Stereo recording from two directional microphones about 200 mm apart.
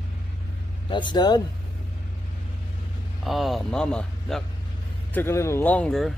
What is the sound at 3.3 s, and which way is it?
Speech, centre (ahead or behind).